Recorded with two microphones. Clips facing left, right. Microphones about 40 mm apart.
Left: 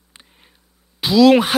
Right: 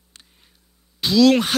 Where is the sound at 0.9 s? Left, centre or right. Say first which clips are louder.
Left 3 dB; centre.